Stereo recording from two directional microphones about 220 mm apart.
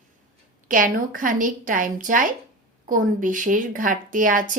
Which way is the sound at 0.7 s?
40° right (ahead or behind).